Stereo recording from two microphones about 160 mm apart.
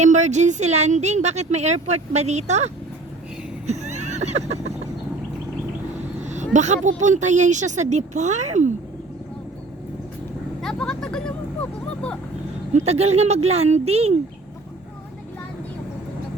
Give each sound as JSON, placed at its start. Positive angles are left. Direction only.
{"t": 0.0, "sound": "speech", "side_deg": -45}
{"t": 3.7, "sound": "neigh", "side_deg": -45}
{"t": 6.2, "sound": "a sound", "side_deg": -50}
{"t": 6.8, "sound": "speech", "side_deg": -50}
{"t": 10.6, "sound": "a sound", "side_deg": 5}
{"t": 12.7, "sound": "speech", "side_deg": -40}